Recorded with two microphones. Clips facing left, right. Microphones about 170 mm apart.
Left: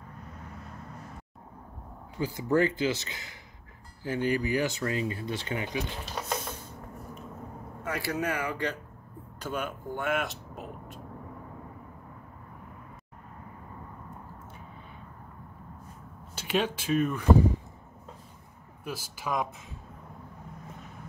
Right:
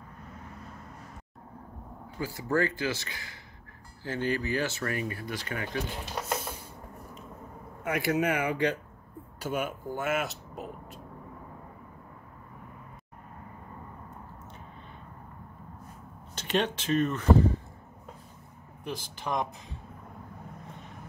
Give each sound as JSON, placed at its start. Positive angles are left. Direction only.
{"t": 2.1, "sound": "speech", "side_deg": 20}
{"t": 6.1, "sound": "printer", "side_deg": -5}
{"t": 7.8, "sound": "speech", "side_deg": -20}
{"t": 9.4, "sound": "speech", "side_deg": -10}
{"t": 16.3, "sound": "speech", "side_deg": 5}
{"t": 18.9, "sound": "speech", "side_deg": 5}